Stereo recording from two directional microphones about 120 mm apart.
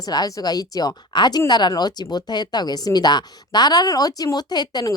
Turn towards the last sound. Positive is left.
turn(degrees=35)  # may be behind; listen again after turning